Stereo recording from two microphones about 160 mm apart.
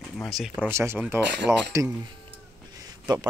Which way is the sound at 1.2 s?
90° right.